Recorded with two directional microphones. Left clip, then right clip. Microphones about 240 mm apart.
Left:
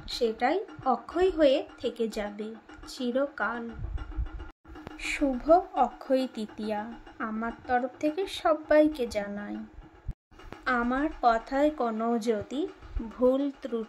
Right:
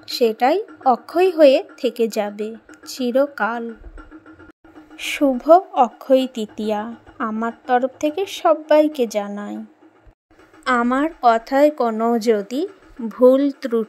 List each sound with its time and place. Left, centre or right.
0.0 s a woman's voice: right
4.9 s a woman's voice: right
10.6 s a woman's voice: right